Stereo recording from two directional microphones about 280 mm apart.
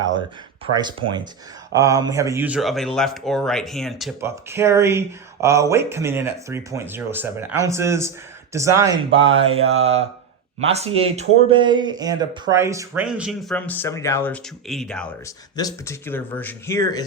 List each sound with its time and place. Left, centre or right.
0.6 s speech: centre